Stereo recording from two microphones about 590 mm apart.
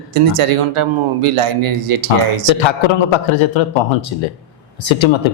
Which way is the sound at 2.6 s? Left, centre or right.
Left.